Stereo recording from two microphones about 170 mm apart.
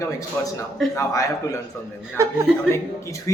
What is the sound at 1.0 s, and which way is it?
Speech, 20° left (ahead or behind).